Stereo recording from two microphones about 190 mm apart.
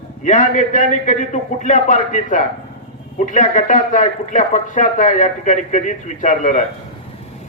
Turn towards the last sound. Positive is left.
turn(degrees=40)  # may be behind; listen again after turning